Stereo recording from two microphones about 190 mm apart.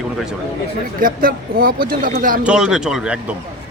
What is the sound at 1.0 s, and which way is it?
Speech, 50° right (ahead or behind).